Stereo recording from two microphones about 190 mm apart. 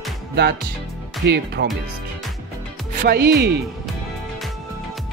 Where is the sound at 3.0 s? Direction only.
60° right (ahead or behind).